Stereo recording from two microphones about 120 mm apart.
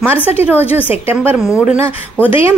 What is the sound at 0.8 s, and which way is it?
Speech, 20° right (ahead or behind).